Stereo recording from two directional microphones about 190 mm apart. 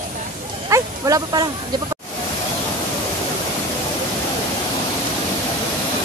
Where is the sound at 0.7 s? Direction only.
20° right (ahead or behind).